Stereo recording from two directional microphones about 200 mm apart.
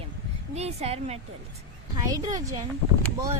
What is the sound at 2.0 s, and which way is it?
Speech, 20° right (ahead or behind).